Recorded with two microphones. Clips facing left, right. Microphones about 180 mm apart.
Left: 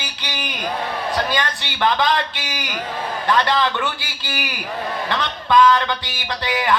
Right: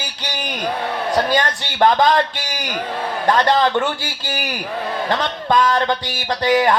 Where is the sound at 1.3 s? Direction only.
45° right (ahead or behind).